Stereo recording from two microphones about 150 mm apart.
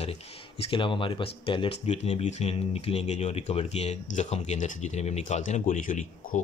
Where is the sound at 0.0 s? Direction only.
45° left (ahead or behind).